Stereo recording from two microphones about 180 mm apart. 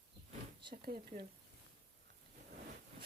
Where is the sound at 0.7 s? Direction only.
55° right (ahead or behind).